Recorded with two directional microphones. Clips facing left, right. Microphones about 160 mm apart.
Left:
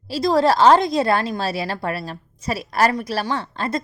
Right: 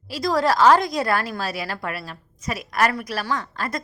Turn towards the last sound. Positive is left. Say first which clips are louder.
# left 3 dB
turn(degrees=25)  # may be behind; listen again after turning